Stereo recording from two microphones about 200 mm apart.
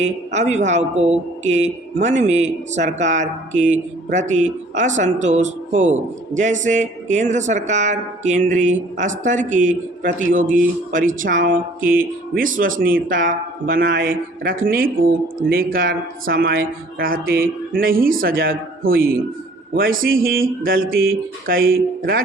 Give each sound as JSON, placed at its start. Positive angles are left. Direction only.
{"t": 0.3, "sound": "speech", "side_deg": -35}